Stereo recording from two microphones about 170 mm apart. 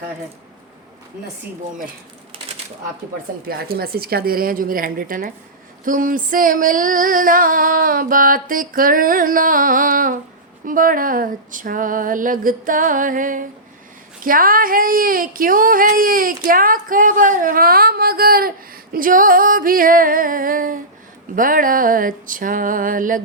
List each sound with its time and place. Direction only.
3.4 s speech: 65° right (ahead or behind)
5.8 s female singing: 55° right (ahead or behind)
14.3 s speech: 55° right (ahead or behind)
21.3 s female singing: 55° right (ahead or behind)